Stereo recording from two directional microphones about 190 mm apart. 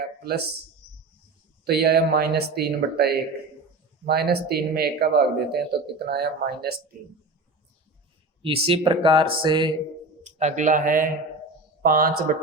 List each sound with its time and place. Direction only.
0.2 s speech: 55° right (ahead or behind)
1.6 s speech: 55° right (ahead or behind)
8.4 s speech: 30° right (ahead or behind)
10.2 s speech: 35° right (ahead or behind)